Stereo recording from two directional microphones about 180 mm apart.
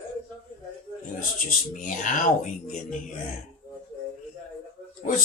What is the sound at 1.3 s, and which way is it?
Speech, 45° left (ahead or behind).